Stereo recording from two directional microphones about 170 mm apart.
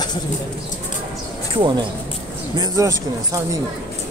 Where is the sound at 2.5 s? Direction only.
20° right (ahead or behind).